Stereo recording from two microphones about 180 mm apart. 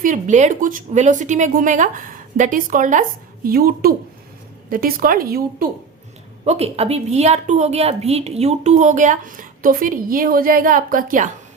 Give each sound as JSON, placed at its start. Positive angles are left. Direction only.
{"t": 0.0, "sound": "a woman's voice", "side_deg": -45}
{"t": 6.4, "sound": "a woman's voice", "side_deg": -35}